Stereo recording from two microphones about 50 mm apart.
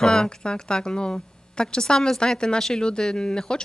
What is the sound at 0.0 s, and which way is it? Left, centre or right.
A woman's voice, centre.